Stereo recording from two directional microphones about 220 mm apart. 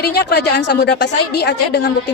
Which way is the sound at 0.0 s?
45° left (ahead or behind).